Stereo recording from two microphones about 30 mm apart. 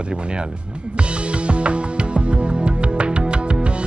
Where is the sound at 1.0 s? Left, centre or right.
Right.